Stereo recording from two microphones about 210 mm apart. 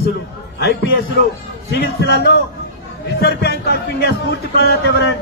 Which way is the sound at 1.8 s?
50° left (ahead or behind).